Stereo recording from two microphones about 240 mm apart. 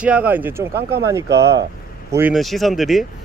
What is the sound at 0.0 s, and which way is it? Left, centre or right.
Speech, centre.